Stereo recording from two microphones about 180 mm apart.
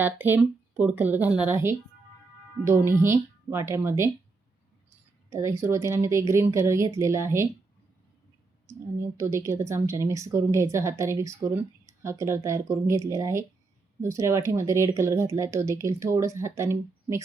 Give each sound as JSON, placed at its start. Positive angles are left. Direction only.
{"t": 0.0, "sound": "a woman's voice", "side_deg": -10}
{"t": 5.3, "sound": "a woman's voice", "side_deg": -15}
{"t": 9.1, "sound": "a woman's voice", "side_deg": -15}